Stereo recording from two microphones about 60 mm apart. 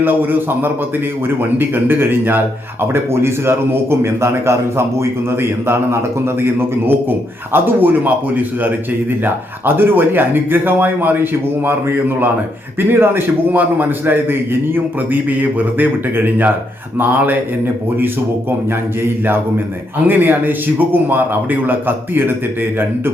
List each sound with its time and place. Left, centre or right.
0.0 s a man's voice: right
19.0 s a man's voice: right